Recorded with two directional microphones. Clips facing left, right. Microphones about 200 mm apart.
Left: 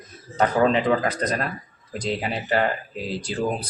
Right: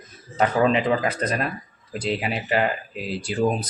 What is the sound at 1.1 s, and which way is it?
Speech, 5° right (ahead or behind).